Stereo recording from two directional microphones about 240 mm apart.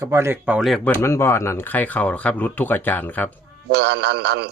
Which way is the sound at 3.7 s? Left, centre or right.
Right.